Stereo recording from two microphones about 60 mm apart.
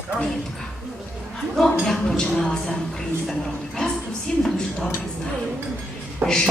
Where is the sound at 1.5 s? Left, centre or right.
Centre.